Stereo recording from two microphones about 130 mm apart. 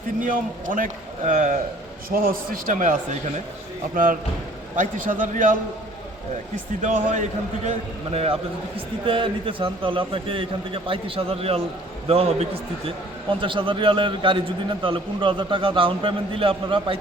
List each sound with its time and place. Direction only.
0.2 s a man's voice: 90° right
3.9 s a man's voice: 90° right
6.8 s a man's voice: 65° right (ahead or behind)
8.1 s a man's voice: 50° right (ahead or behind)
13.4 s a man's voice: 40° right (ahead or behind)